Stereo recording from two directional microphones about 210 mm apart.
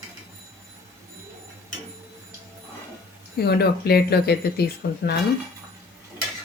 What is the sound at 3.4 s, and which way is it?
Speech, 50° left (ahead or behind).